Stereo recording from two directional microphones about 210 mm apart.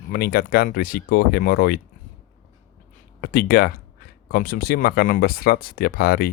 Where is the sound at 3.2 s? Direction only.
45° left (ahead or behind).